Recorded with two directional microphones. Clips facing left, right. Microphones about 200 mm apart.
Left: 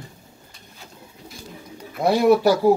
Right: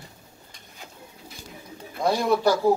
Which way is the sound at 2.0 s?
10° left (ahead or behind).